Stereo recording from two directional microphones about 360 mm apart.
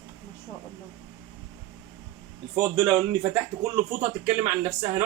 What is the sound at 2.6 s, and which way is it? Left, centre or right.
A man's voice, centre.